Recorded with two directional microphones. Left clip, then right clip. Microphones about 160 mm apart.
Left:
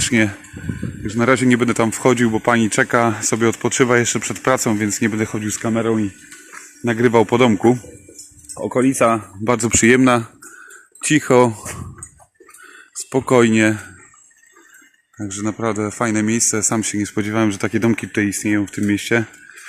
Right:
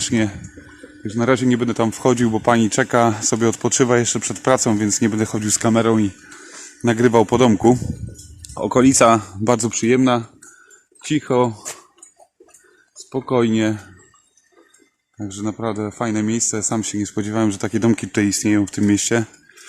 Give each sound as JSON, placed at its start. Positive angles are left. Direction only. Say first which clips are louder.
{"t": 0.0, "sound": "speech", "louder": "left 4 dB", "side_deg": 0}
{"t": 5.5, "sound": "speech", "louder": "right 4 dB", "side_deg": -35}
{"t": 6.8, "sound": "speech", "louder": "even", "side_deg": -20}
{"t": 8.5, "sound": "speech", "louder": "right 3 dB", "side_deg": -45}
{"t": 9.4, "sound": "speech", "louder": "right 1 dB", "side_deg": -15}
{"t": 9.7, "sound": "a man's voice", "louder": "left 4 dB", "side_deg": 15}
{"t": 13.1, "sound": "speech", "louder": "left 6 dB", "side_deg": 30}
{"t": 13.3, "sound": "a man's voice", "louder": "left 4 dB", "side_deg": 10}
{"t": 15.2, "sound": "speech", "louder": "left 2 dB", "side_deg": 0}